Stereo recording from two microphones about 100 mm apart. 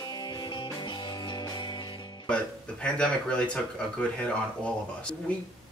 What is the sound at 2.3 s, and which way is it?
Speech, 10° left (ahead or behind).